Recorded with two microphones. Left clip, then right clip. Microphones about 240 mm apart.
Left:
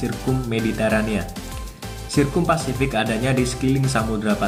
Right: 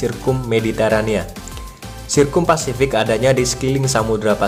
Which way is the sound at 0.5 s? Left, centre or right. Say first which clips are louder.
Right 5 dB; right.